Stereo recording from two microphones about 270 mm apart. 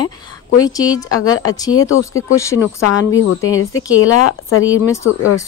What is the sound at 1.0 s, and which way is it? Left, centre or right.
Speech, left.